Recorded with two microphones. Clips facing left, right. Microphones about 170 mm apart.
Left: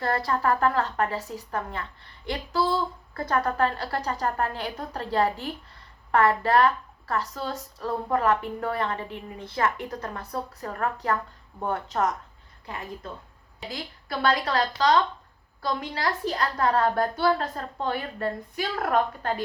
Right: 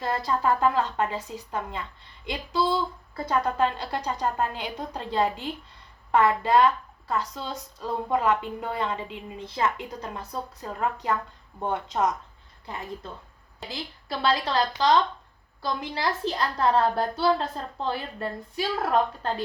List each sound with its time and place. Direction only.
0.0 s a woman's voice: 20° right (ahead or behind)
13.7 s a woman's voice: 25° right (ahead or behind)